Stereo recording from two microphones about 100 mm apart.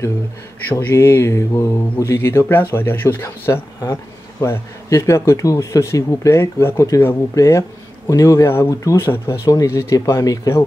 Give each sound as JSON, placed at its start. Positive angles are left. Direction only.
{"t": 0.7, "sound": "speech", "side_deg": 25}